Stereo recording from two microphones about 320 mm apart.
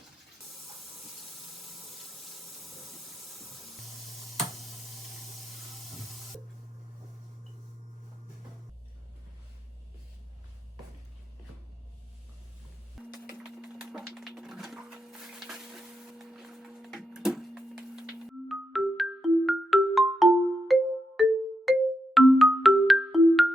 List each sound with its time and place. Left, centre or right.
13.0 s music: centre